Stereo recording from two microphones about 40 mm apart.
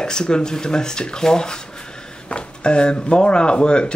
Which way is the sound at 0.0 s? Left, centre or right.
Left.